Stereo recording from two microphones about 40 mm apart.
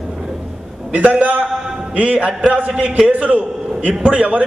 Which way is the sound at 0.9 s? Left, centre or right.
Right.